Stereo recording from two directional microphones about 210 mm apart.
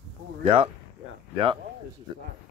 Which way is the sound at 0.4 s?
25° right (ahead or behind).